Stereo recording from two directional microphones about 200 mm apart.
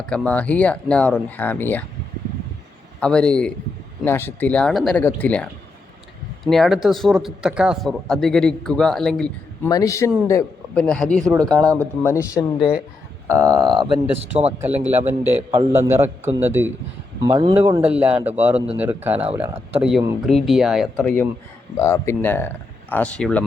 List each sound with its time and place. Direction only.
0.0 s speech: 5° left (ahead or behind)
3.0 s speech: 5° left (ahead or behind)
9.6 s speech: 15° left (ahead or behind)
10.8 s speech: 5° left (ahead or behind)
12.1 s speech: 15° left (ahead or behind)
13.2 s speech: 15° right (ahead or behind)
14.8 s a man's voice: 10° right (ahead or behind)
19.1 s speech: 30° right (ahead or behind)
19.7 s speech: 5° right (ahead or behind)
21.8 s speech: 15° left (ahead or behind)